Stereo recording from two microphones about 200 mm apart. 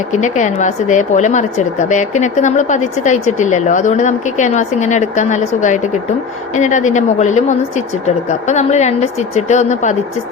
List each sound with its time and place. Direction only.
0.1 s speech: 35° left (ahead or behind)